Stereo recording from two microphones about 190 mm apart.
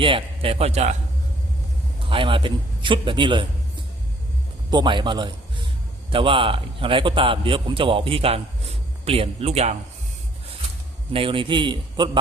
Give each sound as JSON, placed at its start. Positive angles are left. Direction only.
{"t": 0.0, "sound": "a man's voice", "side_deg": -30}
{"t": 2.0, "sound": "a man's voice", "side_deg": -25}
{"t": 4.7, "sound": "a man's voice", "side_deg": -25}
{"t": 11.1, "sound": "a man's voice", "side_deg": -30}